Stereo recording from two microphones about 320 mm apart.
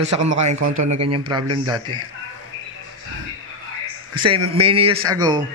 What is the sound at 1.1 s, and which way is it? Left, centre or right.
Speech, centre.